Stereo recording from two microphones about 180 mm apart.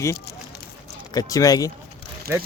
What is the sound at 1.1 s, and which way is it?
Speech, 20° left (ahead or behind).